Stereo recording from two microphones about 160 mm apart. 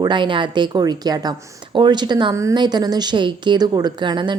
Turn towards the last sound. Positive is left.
turn(degrees=-30)  # may be behind; listen again after turning